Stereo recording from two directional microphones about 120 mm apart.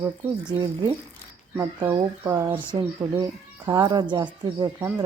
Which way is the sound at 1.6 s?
25° right (ahead or behind).